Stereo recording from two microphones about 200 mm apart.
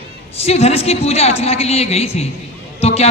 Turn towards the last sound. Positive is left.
turn(degrees=30)  # may be behind; listen again after turning